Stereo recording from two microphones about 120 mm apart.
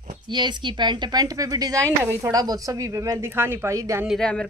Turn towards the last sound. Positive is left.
turn(degrees=10)  # may be behind; listen again after turning